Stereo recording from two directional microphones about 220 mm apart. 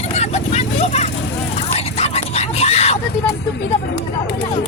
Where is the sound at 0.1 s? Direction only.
30° left (ahead or behind).